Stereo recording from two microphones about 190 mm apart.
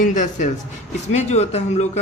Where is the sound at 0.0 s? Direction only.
40° left (ahead or behind).